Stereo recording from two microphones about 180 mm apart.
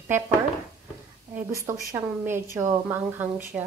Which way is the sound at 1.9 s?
15° right (ahead or behind).